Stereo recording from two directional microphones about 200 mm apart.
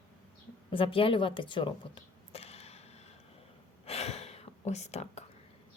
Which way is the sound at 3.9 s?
30° left (ahead or behind).